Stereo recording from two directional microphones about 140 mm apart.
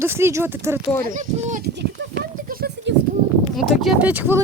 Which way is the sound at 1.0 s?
65° right (ahead or behind).